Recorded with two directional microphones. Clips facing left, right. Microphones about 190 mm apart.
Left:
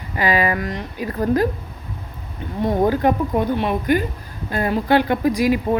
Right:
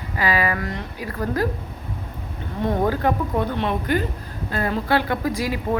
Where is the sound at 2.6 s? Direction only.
15° left (ahead or behind).